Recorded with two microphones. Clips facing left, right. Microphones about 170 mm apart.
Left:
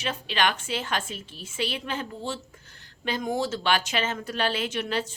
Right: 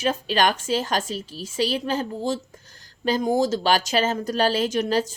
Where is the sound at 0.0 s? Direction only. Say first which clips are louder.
Right 5 dB; 40° right (ahead or behind).